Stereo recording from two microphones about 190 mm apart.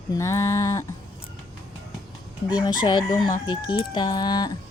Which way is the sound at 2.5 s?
20° left (ahead or behind).